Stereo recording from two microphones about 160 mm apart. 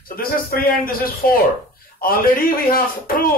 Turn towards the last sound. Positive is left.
turn(degrees=65)  # may be behind; listen again after turning